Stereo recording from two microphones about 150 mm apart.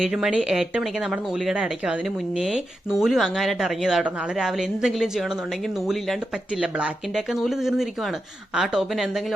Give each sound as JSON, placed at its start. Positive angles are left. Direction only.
{"t": 0.0, "sound": "speech", "side_deg": -5}
{"t": 6.6, "sound": "speech", "side_deg": -5}